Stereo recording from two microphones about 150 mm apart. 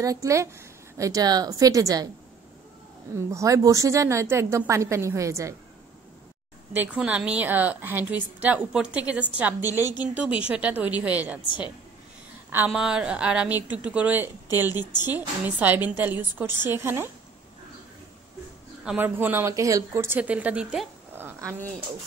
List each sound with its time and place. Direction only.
0.0 s a woman's voice: 20° right (ahead or behind)
3.2 s a woman's voice: 20° right (ahead or behind)
6.7 s a woman's voice: 10° right (ahead or behind)
12.4 s a woman's voice: 10° right (ahead or behind)
18.9 s a woman's voice: 15° right (ahead or behind)
21.1 s a sound: 15° right (ahead or behind)